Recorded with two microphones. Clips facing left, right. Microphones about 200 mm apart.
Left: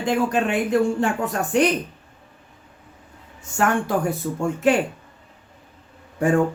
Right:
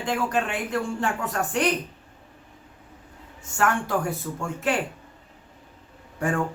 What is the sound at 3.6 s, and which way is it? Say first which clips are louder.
Speech: left 3 dB; 15° left (ahead or behind).